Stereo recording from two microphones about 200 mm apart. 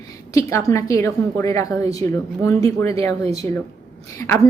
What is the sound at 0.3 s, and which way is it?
Speech, 15° left (ahead or behind).